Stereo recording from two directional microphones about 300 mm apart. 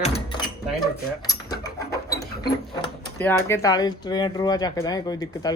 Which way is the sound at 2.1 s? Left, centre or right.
Left.